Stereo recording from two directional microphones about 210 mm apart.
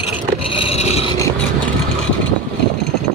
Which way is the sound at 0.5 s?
30° left (ahead or behind).